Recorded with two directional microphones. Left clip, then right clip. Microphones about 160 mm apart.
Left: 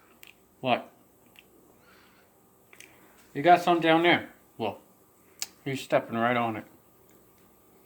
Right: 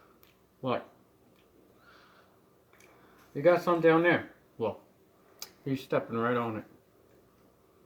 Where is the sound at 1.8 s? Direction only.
5° right (ahead or behind).